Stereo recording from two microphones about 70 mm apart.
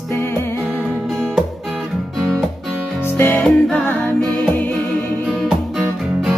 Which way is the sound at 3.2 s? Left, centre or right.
Left.